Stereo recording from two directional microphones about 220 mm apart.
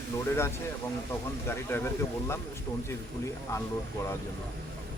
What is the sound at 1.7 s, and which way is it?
Speech, 10° left (ahead or behind).